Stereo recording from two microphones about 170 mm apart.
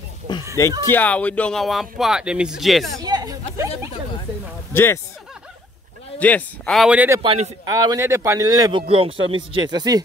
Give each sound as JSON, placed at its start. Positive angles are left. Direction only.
{"t": 0.3, "sound": "music", "side_deg": 25}
{"t": 0.8, "sound": "speech", "side_deg": 10}
{"t": 3.0, "sound": "chatter", "side_deg": -25}
{"t": 4.7, "sound": "speech", "side_deg": 15}
{"t": 6.1, "sound": "speech", "side_deg": 10}
{"t": 7.2, "sound": "a man's voice", "side_deg": -35}
{"t": 7.6, "sound": "speech", "side_deg": -25}